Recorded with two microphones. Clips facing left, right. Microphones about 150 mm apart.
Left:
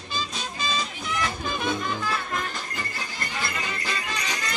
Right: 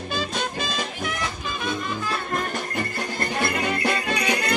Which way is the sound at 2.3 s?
60° right (ahead or behind).